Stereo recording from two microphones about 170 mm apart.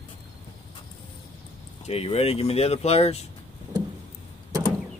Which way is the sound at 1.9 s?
35° left (ahead or behind).